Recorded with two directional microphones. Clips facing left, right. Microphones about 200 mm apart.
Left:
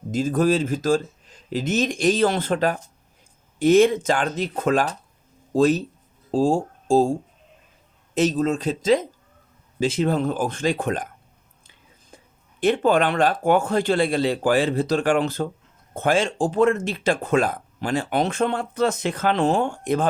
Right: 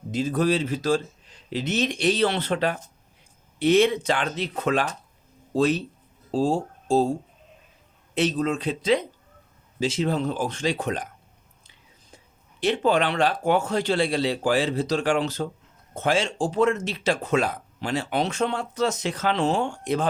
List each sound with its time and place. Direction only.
0.1 s speech: 45° left (ahead or behind)
8.1 s speech: 45° left (ahead or behind)
12.1 s speech: 55° left (ahead or behind)